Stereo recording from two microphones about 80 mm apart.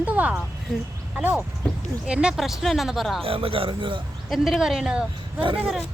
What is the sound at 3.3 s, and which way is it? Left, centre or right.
Speech, right.